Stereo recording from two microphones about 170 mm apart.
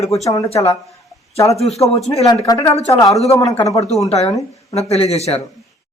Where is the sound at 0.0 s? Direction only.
40° left (ahead or behind).